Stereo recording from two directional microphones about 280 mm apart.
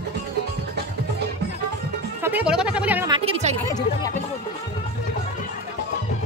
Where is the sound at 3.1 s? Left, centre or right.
Centre.